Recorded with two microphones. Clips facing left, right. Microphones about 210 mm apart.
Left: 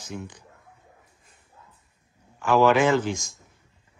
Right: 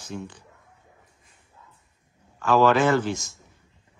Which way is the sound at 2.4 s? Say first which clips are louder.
Even; 15° left (ahead or behind).